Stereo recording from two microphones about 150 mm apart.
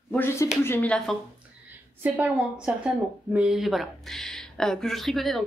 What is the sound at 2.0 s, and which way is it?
A woman's voice, 10° right (ahead or behind).